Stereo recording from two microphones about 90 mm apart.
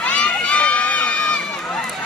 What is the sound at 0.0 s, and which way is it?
Crowd, 10° left (ahead or behind).